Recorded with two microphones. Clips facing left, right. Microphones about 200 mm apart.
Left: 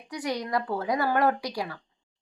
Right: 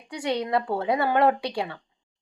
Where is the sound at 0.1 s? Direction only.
25° right (ahead or behind).